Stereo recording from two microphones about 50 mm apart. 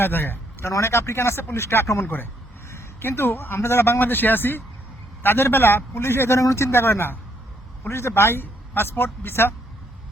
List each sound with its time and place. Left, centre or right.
0.0 s a man's voice: left
0.7 s speech: left
3.0 s a man's voice: left
6.3 s speech: left
7.9 s speech: left
8.8 s a man's voice: left
9.2 s a man's voice: left